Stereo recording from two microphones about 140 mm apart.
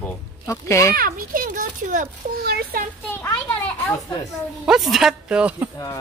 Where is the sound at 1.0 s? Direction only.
90° right.